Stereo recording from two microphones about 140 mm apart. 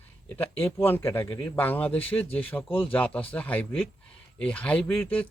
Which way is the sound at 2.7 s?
40° left (ahead or behind).